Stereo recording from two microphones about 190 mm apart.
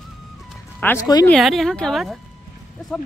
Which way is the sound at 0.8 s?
15° left (ahead or behind).